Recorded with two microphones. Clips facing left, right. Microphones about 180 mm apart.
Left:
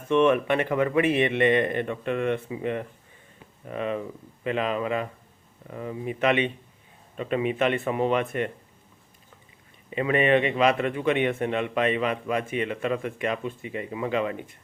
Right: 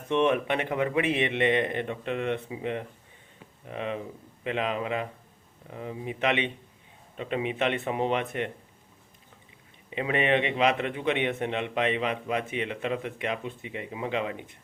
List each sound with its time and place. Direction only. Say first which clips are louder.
0.1 s a man's voice: left 4 dB; 20° right (ahead or behind)
9.9 s a man's voice: left 4 dB; 20° right (ahead or behind)